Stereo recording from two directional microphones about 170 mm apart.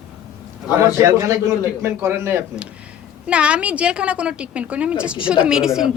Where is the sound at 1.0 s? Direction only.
20° right (ahead or behind).